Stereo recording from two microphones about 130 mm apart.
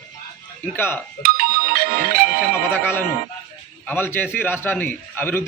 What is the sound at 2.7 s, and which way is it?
Music, 15° left (ahead or behind).